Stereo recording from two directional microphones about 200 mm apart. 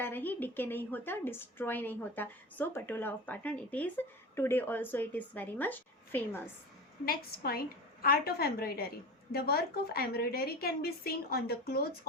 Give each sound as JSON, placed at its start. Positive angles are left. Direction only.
{"t": 0.0, "sound": "a woman's voice", "side_deg": 10}
{"t": 7.0, "sound": "a woman's voice", "side_deg": 50}